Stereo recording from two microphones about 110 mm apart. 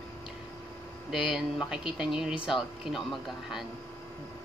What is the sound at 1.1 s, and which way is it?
Speech, 5° right (ahead or behind).